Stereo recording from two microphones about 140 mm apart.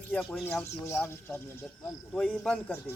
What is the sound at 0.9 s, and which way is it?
A man's voice, 15° left (ahead or behind).